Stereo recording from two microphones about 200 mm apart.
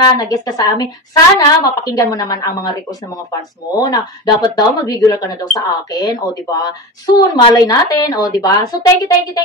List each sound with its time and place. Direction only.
0.0 s a woman's voice: 20° left (ahead or behind)
3.7 s a woman's voice: 20° left (ahead or behind)